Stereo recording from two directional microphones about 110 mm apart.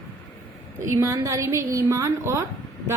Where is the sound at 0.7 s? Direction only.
25° right (ahead or behind).